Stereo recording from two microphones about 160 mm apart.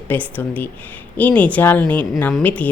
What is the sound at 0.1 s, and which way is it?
Speech, 10° left (ahead or behind).